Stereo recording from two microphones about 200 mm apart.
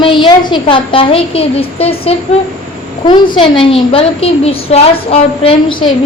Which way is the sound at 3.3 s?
25° left (ahead or behind).